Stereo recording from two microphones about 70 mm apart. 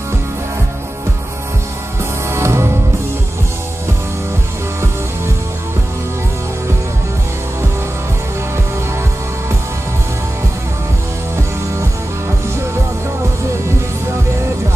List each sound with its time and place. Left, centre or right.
2.2 s music: right